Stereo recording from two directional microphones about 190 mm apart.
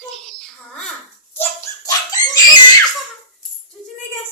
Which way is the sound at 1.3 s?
15° left (ahead or behind).